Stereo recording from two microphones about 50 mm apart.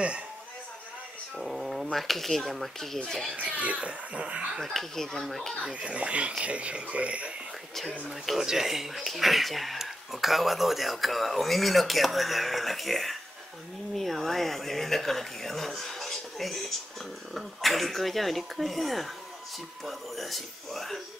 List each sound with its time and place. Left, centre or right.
1.4 s cat: centre
1.9 s speech: centre
3.3 s speech: right
4.6 s speech: centre
5.7 s speech: right
8.3 s speech: centre